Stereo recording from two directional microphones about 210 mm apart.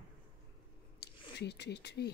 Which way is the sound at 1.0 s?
50° left (ahead or behind).